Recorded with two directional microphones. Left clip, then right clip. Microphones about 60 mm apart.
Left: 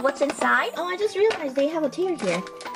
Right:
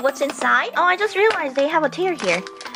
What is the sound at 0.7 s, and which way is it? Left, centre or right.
Speech, right.